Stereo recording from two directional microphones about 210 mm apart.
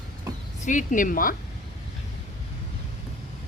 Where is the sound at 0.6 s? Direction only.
35° left (ahead or behind).